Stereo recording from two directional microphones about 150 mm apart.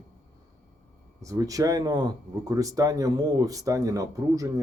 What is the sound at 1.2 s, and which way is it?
Speech, 20° right (ahead or behind).